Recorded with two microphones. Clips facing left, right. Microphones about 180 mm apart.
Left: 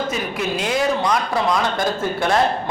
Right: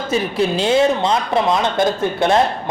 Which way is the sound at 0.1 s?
30° right (ahead or behind).